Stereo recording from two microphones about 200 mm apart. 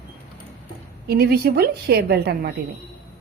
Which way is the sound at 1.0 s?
50° right (ahead or behind).